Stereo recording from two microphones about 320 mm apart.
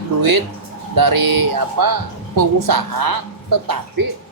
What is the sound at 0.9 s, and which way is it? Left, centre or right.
Speech, right.